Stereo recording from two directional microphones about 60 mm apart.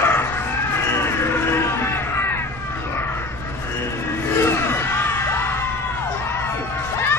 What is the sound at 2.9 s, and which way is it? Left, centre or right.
Crow, left.